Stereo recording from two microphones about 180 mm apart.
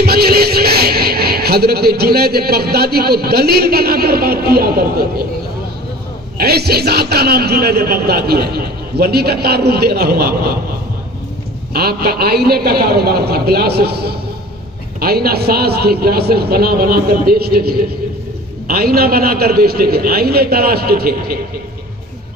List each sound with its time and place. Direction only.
0.0 s speech: 60° right (ahead or behind)
6.3 s a man's voice: 60° right (ahead or behind)
11.7 s a man's voice: 60° right (ahead or behind)